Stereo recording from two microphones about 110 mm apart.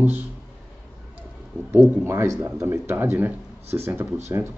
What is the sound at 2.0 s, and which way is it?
Speech, 25° right (ahead or behind).